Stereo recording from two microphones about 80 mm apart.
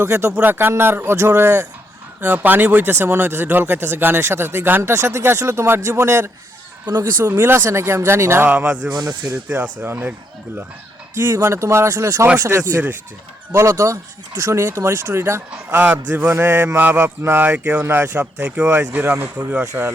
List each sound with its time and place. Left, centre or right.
0.0 s speech: right
8.4 s speech: centre
8.9 s speech: right
9.5 s speech: right
11.1 s speech: right
15.4 s speech: centre
18.3 s speech: centre